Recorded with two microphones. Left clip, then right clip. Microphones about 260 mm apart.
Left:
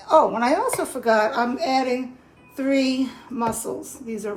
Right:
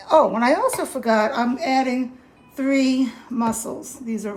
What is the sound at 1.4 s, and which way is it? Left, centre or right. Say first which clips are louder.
Speech: right 1 dB; right.